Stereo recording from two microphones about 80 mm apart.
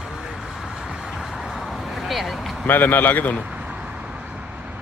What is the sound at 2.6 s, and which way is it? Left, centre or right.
Speech, left.